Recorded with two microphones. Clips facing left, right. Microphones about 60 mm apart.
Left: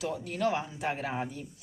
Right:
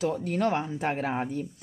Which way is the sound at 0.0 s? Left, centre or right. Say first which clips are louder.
Right 4 dB; right.